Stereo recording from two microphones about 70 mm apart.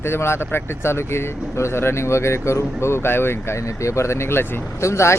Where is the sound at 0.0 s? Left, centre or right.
Left.